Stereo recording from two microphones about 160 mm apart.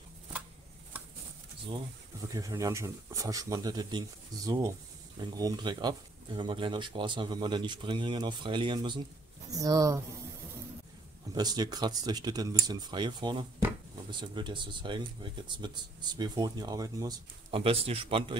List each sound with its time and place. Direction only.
2.2 s speech: 20° right (ahead or behind)
11.3 s speech: 25° right (ahead or behind)